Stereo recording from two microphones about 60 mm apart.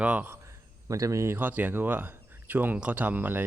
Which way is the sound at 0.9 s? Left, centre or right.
Right.